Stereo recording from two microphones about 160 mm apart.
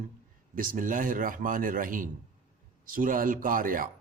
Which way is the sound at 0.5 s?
60° right (ahead or behind).